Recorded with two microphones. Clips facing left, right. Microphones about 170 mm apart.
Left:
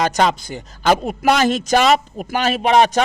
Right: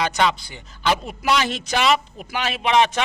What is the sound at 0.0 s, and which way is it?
A man's voice, 45° left (ahead or behind).